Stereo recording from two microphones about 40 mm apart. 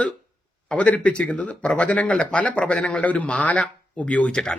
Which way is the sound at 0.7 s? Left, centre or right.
Left.